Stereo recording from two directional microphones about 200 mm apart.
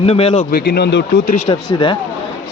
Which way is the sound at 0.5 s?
55° left (ahead or behind).